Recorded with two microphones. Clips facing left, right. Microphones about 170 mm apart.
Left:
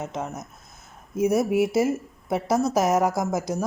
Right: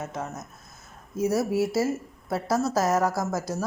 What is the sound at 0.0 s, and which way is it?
A woman's voice, 20° left (ahead or behind).